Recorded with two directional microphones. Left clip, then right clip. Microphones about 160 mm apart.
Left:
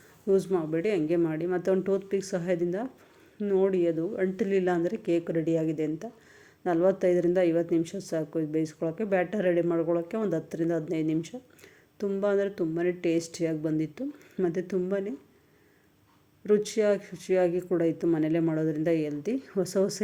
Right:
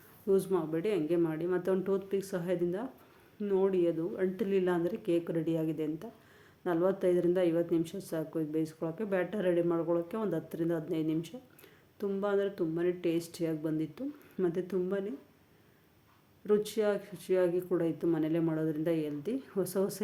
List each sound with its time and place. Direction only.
0.3 s a woman's voice: 25° left (ahead or behind)
16.5 s a woman's voice: 25° left (ahead or behind)